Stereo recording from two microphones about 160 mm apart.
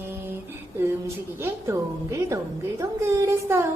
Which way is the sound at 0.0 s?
15° right (ahead or behind).